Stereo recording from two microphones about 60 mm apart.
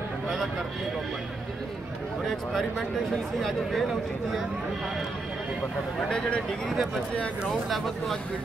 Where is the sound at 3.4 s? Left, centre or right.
Centre.